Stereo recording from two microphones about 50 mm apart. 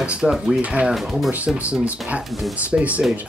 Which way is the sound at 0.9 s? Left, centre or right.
Centre.